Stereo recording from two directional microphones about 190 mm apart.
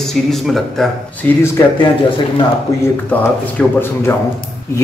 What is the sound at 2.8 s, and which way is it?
Speech, 10° left (ahead or behind).